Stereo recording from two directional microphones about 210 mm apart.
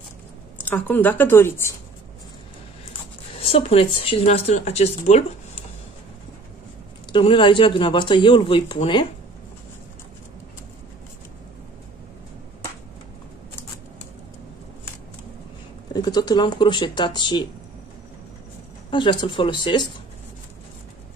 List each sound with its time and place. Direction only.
0.7 s speech: 10° left (ahead or behind)
3.4 s speech: 25° left (ahead or behind)
7.1 s speech: 25° left (ahead or behind)
15.9 s speech: 20° left (ahead or behind)
18.9 s speech: 25° left (ahead or behind)